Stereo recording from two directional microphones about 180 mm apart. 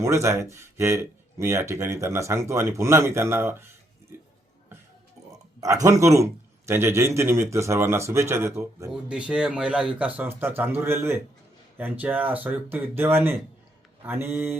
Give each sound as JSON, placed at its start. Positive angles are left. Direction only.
{"t": 0.0, "sound": "speech", "side_deg": -15}
{"t": 5.5, "sound": "speech", "side_deg": -20}